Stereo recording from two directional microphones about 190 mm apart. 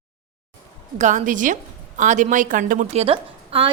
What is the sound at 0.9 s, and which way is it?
A woman's voice, 40° right (ahead or behind).